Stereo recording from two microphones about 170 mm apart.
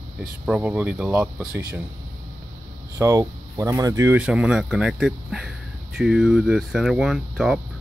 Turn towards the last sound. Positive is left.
turn(degrees=0)  # may be behind; listen again after turning